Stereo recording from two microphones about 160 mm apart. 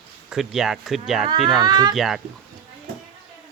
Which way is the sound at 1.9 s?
Centre (ahead or behind).